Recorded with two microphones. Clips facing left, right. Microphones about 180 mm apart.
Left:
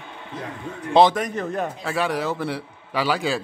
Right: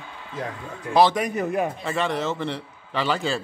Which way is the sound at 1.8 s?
5° left (ahead or behind).